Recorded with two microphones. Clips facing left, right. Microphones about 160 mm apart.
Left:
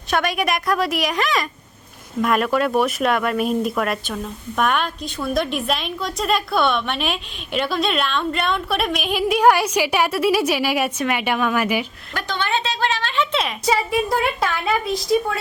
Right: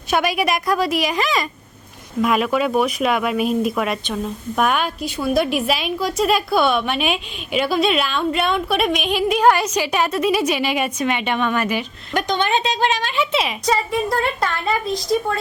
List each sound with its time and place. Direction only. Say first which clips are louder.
0.1 s speech: right 2 dB; 5° right (ahead or behind)
12.1 s a woman's voice: right 4 dB; 20° right (ahead or behind); by 14.8 s 5° left (ahead or behind)